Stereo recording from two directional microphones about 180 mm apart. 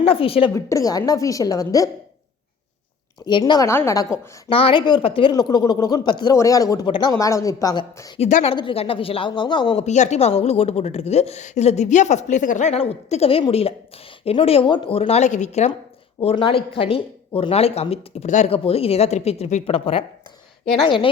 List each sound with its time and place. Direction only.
0.0 s a woman's voice: 30° left (ahead or behind)
0.5 s speech: 20° left (ahead or behind)
3.2 s speech: 25° left (ahead or behind)
4.4 s speech: 30° left (ahead or behind)
8.2 s a woman's voice: 40° left (ahead or behind)
9.8 s a woman's voice: 40° left (ahead or behind)
16.2 s a woman's voice: 30° left (ahead or behind)